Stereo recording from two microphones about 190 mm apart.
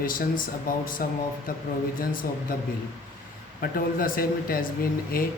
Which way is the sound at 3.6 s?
50° left (ahead or behind).